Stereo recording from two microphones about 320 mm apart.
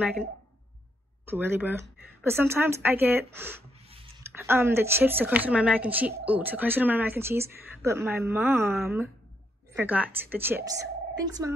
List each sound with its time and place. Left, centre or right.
1.3 s a woman's voice: centre
3.9 s a sound: centre
4.3 s a woman's voice: centre